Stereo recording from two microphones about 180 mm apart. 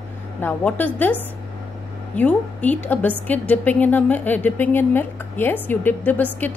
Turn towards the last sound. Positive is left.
turn(degrees=10)  # may be behind; listen again after turning